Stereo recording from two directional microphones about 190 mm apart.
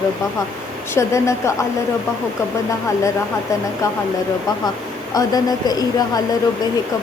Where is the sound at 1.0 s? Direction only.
15° left (ahead or behind).